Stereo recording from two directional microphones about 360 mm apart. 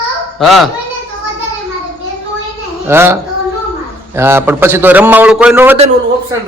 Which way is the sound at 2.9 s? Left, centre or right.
Centre.